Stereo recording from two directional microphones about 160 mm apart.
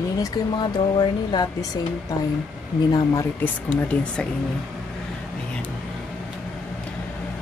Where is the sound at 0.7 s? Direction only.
25° left (ahead or behind).